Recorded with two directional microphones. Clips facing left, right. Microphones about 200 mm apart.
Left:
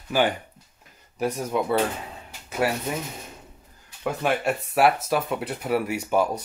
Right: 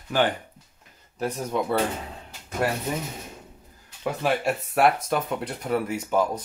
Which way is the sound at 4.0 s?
Centre (ahead or behind).